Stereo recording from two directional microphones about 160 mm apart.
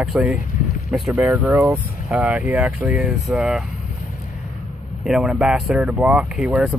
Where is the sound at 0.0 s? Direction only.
5° right (ahead or behind).